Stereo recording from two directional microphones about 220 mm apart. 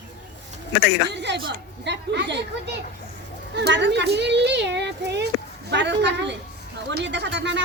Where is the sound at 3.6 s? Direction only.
50° right (ahead or behind).